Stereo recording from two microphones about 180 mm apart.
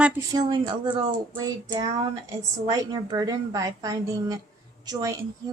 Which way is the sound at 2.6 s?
20° right (ahead or behind).